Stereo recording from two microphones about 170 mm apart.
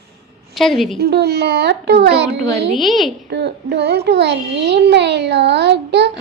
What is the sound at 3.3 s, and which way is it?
A child's voice, 90° right.